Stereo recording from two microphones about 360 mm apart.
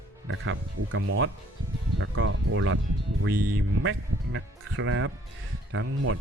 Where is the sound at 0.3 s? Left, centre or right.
Right.